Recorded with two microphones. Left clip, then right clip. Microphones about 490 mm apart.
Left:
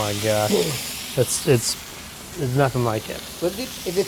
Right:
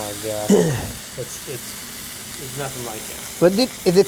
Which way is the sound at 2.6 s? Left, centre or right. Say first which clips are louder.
Left 9 dB; left.